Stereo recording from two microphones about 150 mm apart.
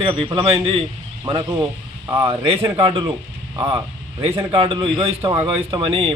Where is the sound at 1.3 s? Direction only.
25° right (ahead or behind).